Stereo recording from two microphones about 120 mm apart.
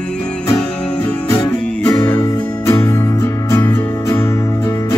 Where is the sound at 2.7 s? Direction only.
25° left (ahead or behind).